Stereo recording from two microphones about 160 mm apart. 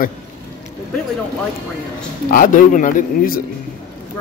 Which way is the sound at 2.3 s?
55° left (ahead or behind).